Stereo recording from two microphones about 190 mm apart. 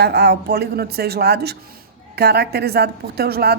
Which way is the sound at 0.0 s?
60° right (ahead or behind).